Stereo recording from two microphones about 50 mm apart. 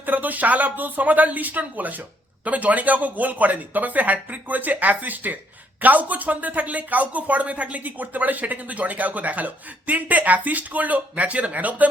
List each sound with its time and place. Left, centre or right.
0.0 s speech: right